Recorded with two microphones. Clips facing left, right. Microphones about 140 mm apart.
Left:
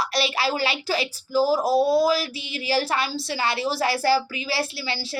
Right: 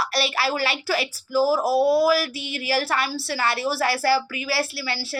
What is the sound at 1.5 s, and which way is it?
Speech, 10° right (ahead or behind).